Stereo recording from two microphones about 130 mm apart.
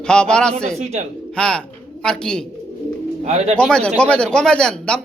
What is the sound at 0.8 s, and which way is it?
Speech, 55° right (ahead or behind).